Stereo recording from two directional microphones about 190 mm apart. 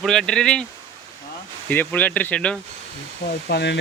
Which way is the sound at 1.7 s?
10° left (ahead or behind).